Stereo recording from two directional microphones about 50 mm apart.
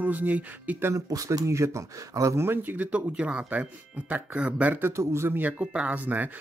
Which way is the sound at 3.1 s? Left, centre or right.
Right.